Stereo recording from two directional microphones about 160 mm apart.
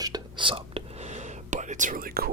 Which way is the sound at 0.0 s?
25° right (ahead or behind).